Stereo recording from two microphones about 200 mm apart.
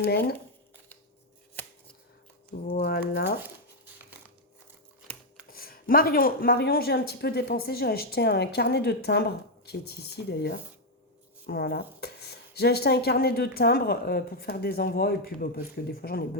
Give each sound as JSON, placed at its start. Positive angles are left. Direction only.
{"t": 0.0, "sound": "speech", "side_deg": 50}
{"t": 1.6, "sound": "chopping", "side_deg": 10}
{"t": 2.5, "sound": "speech", "side_deg": 45}
{"t": 5.5, "sound": "speech", "side_deg": 45}